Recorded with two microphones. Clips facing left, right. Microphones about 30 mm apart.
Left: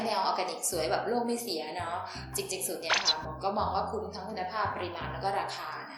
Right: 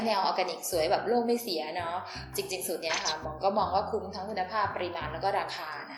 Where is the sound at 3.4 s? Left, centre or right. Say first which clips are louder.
Right 3 dB; centre.